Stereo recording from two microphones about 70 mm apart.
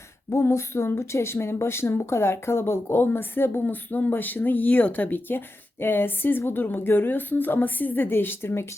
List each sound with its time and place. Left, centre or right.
0.3 s a woman's voice: left